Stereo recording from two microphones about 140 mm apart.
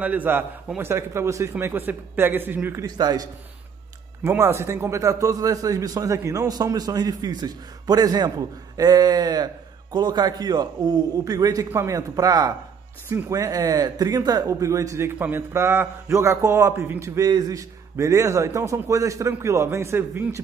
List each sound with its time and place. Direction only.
0.0 s a man's voice: 10° right (ahead or behind)